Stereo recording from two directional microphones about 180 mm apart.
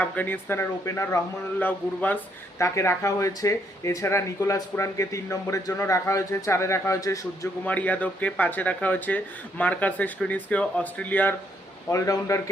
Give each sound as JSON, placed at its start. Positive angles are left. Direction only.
{"t": 0.0, "sound": "speech", "side_deg": 10}